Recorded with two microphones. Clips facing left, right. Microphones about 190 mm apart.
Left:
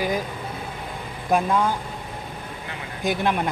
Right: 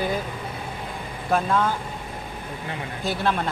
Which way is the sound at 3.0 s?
15° left (ahead or behind).